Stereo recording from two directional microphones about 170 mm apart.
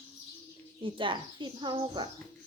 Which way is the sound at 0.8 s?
30° right (ahead or behind).